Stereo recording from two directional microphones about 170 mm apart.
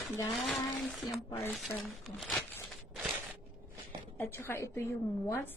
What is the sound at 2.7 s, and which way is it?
Crushing, centre (ahead or behind).